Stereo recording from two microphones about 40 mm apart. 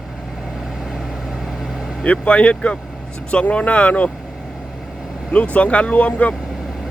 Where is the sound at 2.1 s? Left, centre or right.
Left.